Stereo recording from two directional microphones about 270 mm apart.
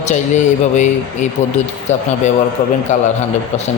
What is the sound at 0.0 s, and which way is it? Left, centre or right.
A man's voice, left.